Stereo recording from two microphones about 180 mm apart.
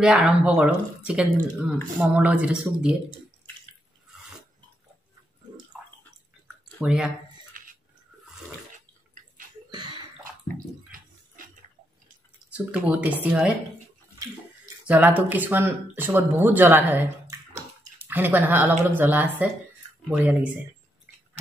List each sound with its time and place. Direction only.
0.0 s speech: 5° right (ahead or behind)
6.4 s a sound: 5° right (ahead or behind)
7.5 s a sound: 50° right (ahead or behind)
10.9 s bathtub: 50° right (ahead or behind)
12.4 s speech: 5° right (ahead or behind)
14.9 s speech: 10° right (ahead or behind)